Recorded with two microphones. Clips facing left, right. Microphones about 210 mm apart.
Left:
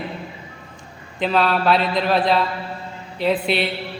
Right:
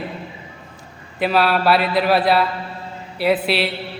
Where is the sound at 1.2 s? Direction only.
10° right (ahead or behind).